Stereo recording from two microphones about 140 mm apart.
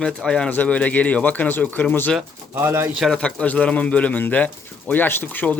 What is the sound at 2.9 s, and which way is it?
Speech, centre (ahead or behind).